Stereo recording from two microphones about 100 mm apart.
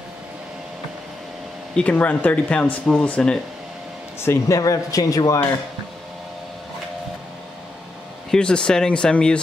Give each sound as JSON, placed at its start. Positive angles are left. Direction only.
{"t": 1.8, "sound": "speech", "side_deg": 15}
{"t": 4.2, "sound": "speech", "side_deg": 25}
{"t": 4.6, "sound": "a man's voice", "side_deg": 35}
{"t": 8.3, "sound": "speech", "side_deg": 10}